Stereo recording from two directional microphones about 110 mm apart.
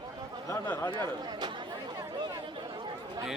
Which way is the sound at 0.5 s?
25° left (ahead or behind).